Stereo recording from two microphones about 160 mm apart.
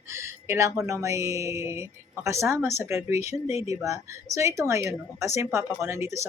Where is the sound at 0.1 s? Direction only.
15° right (ahead or behind).